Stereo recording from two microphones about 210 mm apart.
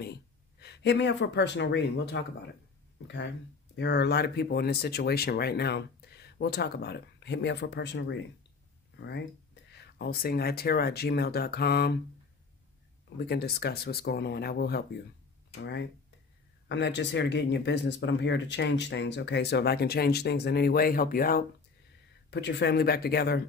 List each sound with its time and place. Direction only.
0.0 s speech: 50° left (ahead or behind)
3.7 s speech: 55° left (ahead or behind)
13.2 s speech: 50° left (ahead or behind)
22.3 s speech: 55° left (ahead or behind)